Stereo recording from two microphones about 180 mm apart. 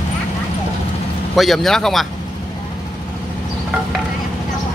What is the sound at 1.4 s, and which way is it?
Speech, centre (ahead or behind).